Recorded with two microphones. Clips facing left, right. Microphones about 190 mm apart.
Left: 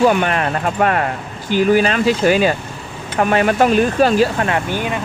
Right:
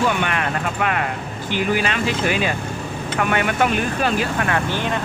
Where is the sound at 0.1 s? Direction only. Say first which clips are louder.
Left 5 dB; 40° left (ahead or behind).